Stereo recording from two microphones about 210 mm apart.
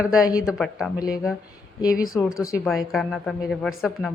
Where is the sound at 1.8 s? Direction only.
15° left (ahead or behind).